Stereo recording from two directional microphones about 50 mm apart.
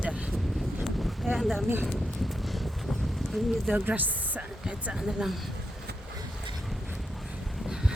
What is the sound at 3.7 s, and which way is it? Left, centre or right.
Speech, right.